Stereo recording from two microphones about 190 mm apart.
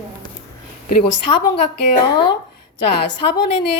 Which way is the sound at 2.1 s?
25° left (ahead or behind).